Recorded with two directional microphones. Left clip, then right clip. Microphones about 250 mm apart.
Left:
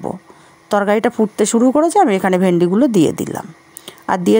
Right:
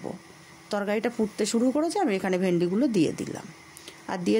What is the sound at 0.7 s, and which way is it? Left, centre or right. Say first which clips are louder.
Speech: left 13 dB; left.